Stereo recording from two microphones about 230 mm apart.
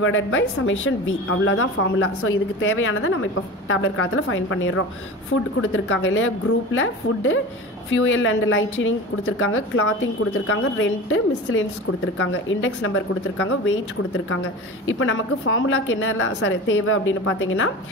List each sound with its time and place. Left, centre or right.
0.0 s a woman's voice: left
14.9 s a woman's voice: left